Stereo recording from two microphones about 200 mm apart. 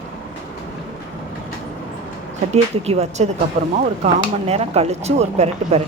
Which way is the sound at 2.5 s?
30° right (ahead or behind).